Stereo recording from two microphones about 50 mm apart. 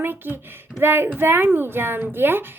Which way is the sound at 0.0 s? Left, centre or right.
Right.